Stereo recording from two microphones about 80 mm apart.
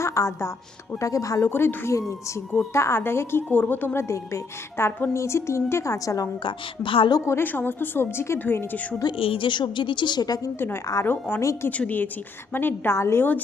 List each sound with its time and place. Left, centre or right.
0.0 s a woman's voice: left
1.5 s a woman's voice: left
5.1 s a woman's voice: left
6.4 s a woman's voice: left
7.3 s a woman's voice: left
9.0 s a woman's voice: left
11.0 s a woman's voice: left
11.3 s a woman's voice: left
11.8 s a woman's voice: left